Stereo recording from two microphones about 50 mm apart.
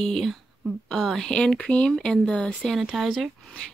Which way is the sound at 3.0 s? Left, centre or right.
Centre.